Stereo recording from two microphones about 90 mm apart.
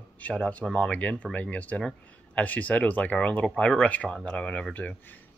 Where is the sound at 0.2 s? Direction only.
10° left (ahead or behind).